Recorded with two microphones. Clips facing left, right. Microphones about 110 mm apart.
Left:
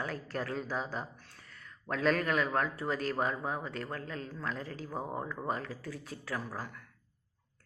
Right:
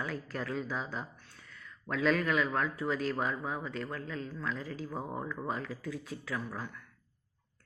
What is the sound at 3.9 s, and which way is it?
Speech, 50° left (ahead or behind).